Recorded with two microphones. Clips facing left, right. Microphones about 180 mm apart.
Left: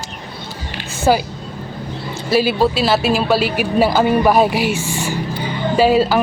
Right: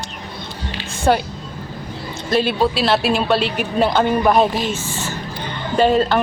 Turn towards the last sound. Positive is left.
turn(degrees=5)  # may be behind; listen again after turning